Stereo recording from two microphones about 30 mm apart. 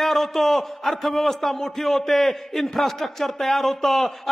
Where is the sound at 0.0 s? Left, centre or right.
Centre.